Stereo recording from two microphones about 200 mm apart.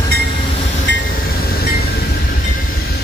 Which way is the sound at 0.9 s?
65° left (ahead or behind).